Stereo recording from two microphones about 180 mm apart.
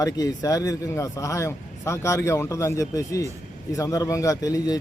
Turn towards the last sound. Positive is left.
turn(degrees=20)  # may be behind; listen again after turning